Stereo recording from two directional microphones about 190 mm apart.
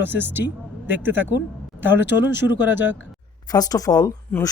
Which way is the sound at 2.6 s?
10° right (ahead or behind).